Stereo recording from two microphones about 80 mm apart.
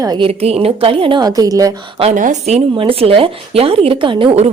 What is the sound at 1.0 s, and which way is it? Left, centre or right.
Speech, right.